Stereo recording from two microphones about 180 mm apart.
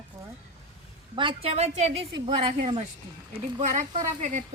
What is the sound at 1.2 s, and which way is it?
Speech, 30° right (ahead or behind).